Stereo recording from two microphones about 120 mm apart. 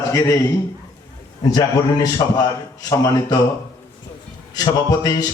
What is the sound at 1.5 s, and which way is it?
A man's voice, 35° left (ahead or behind).